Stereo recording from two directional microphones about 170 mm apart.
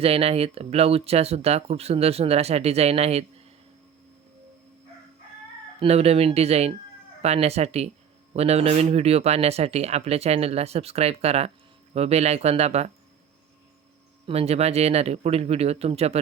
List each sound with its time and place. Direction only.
0.0 s speech: 35° right (ahead or behind)
5.8 s speech: 35° right (ahead or behind)
14.3 s speech: 35° right (ahead or behind)